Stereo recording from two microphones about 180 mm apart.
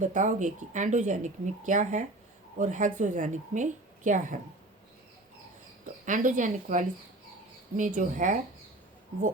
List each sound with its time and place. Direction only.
0.0 s speech: 45° right (ahead or behind)
5.8 s speech: 45° right (ahead or behind)